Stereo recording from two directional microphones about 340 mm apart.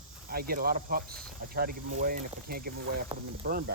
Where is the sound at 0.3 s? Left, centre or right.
Right.